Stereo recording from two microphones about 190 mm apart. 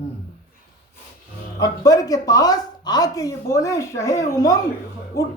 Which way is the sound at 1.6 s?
20° left (ahead or behind).